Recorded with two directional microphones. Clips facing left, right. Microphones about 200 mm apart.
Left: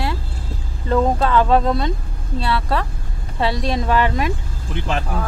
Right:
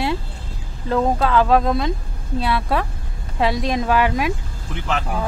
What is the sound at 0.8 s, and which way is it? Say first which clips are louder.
Speech: left 1 dB; centre (ahead or behind).